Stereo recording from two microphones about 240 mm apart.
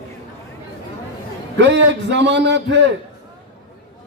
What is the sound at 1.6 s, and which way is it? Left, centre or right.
A man's voice, right.